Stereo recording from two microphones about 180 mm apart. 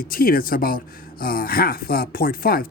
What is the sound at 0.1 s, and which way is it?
A man's voice, 55° left (ahead or behind).